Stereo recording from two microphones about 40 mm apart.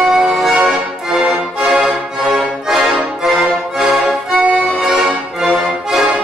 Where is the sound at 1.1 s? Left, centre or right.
Right.